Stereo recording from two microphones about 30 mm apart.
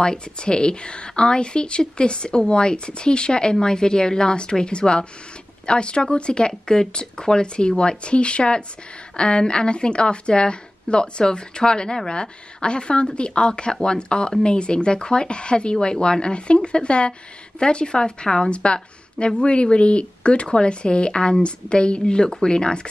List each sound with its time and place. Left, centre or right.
0.0 s a woman's voice: left
18.5 s a woman's voice: left